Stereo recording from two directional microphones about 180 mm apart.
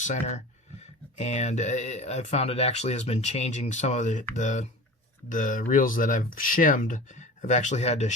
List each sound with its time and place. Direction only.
0.0 s speech: 40° left (ahead or behind)